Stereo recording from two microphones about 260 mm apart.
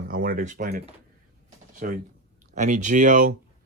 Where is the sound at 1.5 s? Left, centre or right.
Right.